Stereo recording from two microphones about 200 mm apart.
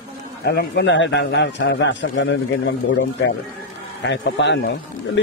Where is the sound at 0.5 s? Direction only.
55° left (ahead or behind).